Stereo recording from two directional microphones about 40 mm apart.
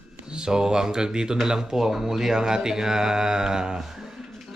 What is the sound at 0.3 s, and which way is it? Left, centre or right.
Speech, right.